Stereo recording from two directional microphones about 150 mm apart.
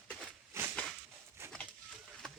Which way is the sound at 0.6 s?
15° right (ahead or behind).